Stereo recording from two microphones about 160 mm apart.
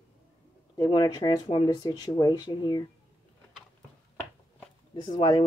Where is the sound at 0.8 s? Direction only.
25° left (ahead or behind).